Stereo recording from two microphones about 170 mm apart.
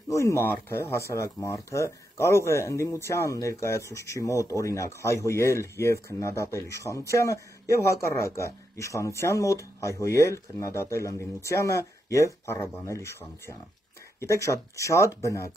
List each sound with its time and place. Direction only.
0.1 s speech: 15° left (ahead or behind)